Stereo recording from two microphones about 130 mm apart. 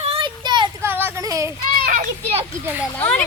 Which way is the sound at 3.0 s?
10° left (ahead or behind).